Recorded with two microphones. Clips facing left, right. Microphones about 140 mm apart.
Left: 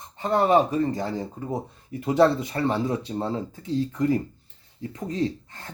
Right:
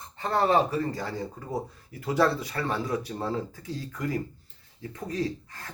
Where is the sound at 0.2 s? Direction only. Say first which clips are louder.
Left 4 dB; 15° left (ahead or behind).